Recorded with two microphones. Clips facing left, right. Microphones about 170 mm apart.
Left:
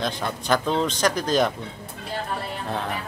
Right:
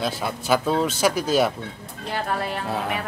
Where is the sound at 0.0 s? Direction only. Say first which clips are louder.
Right 1 dB; 5° right (ahead or behind).